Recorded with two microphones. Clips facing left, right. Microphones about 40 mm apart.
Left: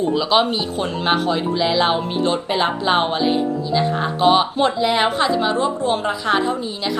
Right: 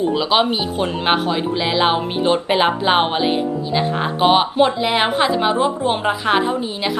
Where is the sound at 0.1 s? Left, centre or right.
Centre.